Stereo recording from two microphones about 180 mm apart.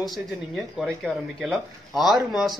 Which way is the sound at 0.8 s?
Centre (ahead or behind).